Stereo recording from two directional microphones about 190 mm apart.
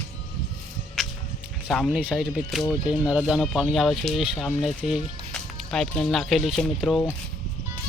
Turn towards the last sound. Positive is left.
turn(degrees=0)  # may be behind; listen again after turning